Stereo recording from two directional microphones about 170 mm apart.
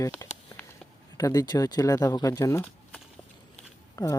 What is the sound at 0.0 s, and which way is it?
Speech, 20° left (ahead or behind).